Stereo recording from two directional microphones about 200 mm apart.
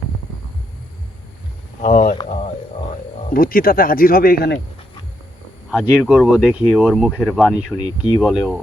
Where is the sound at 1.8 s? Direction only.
35° left (ahead or behind).